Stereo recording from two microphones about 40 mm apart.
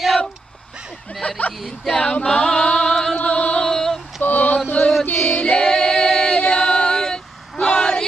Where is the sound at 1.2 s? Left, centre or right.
Left.